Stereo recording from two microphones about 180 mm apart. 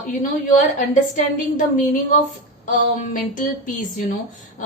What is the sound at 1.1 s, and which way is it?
Speech, 45° left (ahead or behind).